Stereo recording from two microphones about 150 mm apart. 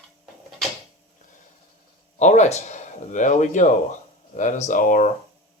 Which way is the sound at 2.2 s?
50° left (ahead or behind).